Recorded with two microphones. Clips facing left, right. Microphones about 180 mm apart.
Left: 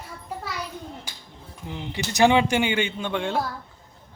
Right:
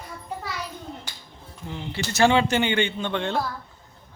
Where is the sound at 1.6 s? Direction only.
15° left (ahead or behind).